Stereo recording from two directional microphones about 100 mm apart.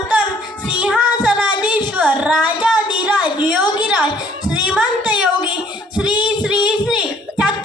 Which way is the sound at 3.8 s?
10° right (ahead or behind).